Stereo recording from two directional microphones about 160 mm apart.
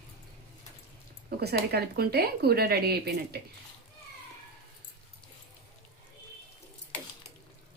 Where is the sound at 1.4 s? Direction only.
80° right.